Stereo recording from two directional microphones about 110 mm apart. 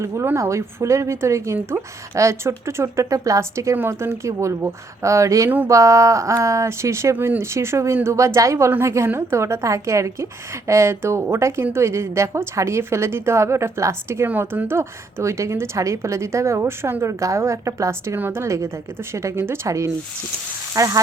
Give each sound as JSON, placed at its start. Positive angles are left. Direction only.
{"t": 0.0, "sound": "a woman's voice", "side_deg": -25}